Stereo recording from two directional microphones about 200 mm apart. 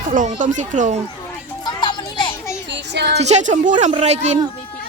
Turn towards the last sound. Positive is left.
turn(degrees=-35)  # may be behind; listen again after turning